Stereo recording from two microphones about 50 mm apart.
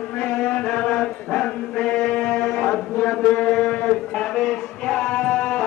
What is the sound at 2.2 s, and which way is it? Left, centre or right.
Mantra, left.